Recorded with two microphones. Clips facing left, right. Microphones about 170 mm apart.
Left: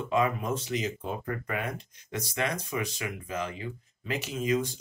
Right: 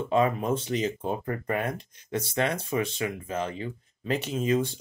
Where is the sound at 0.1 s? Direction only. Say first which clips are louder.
Right 3 dB; 30° right (ahead or behind).